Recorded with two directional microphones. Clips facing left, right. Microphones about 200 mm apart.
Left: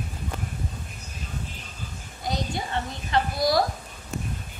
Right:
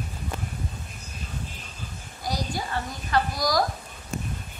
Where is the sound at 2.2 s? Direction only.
25° left (ahead or behind).